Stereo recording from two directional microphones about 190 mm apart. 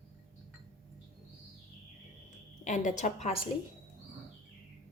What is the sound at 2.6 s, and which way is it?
Speech, 40° left (ahead or behind).